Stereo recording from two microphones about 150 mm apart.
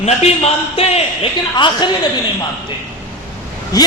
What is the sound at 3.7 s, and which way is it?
Speech, 25° left (ahead or behind).